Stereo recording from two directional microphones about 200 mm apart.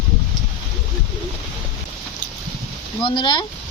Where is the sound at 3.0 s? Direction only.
25° left (ahead or behind).